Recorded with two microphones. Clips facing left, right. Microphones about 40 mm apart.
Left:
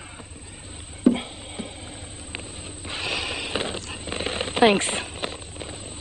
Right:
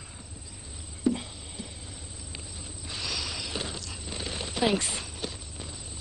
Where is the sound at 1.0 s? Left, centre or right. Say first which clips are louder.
Left 8 dB; left.